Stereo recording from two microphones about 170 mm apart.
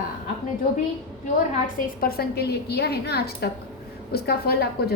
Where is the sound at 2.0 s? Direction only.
65° left (ahead or behind).